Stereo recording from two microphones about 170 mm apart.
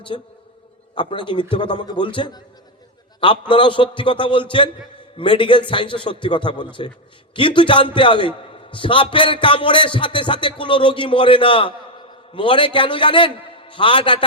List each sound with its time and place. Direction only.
0.1 s a man's voice: 35° left (ahead or behind)